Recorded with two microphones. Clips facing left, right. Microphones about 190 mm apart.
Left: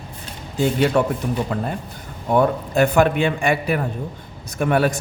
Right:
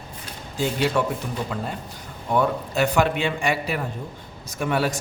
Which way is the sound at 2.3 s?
50° left (ahead or behind).